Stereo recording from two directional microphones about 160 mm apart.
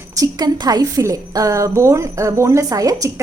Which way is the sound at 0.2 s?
25° right (ahead or behind).